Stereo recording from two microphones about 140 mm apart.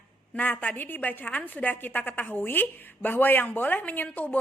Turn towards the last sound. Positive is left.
turn(degrees=10)  # may be behind; listen again after turning